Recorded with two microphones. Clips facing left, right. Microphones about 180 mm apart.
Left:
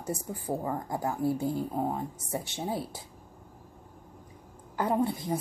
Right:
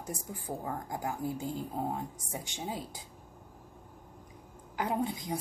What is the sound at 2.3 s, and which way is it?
Speech, 75° left (ahead or behind).